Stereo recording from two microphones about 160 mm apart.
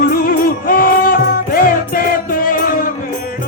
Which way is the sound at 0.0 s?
65° left (ahead or behind).